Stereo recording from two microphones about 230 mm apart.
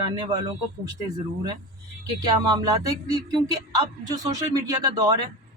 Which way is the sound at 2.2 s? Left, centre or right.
Centre.